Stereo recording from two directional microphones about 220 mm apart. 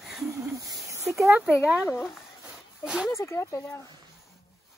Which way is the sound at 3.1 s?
15° left (ahead or behind).